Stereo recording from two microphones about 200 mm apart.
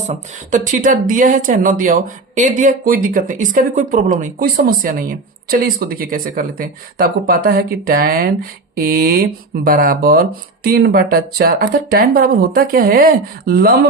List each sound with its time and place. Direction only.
0.1 s speech: 40° right (ahead or behind)